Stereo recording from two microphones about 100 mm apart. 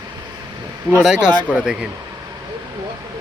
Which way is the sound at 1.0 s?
5° right (ahead or behind).